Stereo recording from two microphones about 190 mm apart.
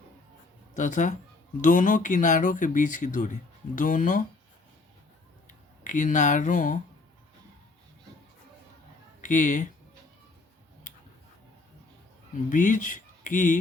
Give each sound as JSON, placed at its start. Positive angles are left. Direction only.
{"t": 0.8, "sound": "speech", "side_deg": 40}
{"t": 5.8, "sound": "speech", "side_deg": 40}
{"t": 9.2, "sound": "speech", "side_deg": 40}
{"t": 12.5, "sound": "speech", "side_deg": 45}